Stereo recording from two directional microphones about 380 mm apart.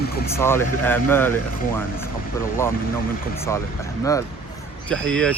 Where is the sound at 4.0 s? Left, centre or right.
Centre.